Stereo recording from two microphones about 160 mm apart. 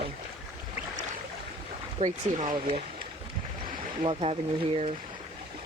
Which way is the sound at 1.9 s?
45° right (ahead or behind).